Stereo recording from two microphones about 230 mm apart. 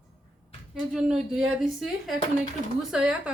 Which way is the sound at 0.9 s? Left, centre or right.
Centre.